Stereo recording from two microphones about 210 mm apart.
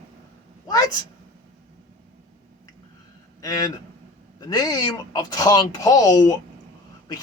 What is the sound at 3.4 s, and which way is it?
Speech, 20° left (ahead or behind).